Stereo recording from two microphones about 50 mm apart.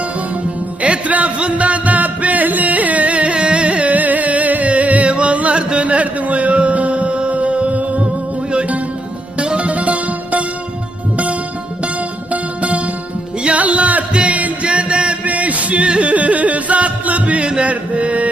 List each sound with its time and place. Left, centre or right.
0.8 s music: right
9.4 s music: right
12.3 s music: right